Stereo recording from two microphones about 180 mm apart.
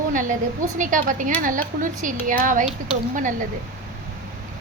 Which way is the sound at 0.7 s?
45° right (ahead or behind).